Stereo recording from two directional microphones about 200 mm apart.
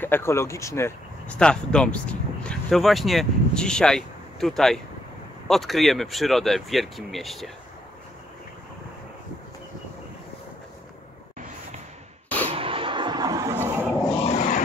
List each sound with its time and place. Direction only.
0.0 s speech: 10° left (ahead or behind)
12.5 s a sound: 25° right (ahead or behind)
14.2 s vehicle: 35° left (ahead or behind)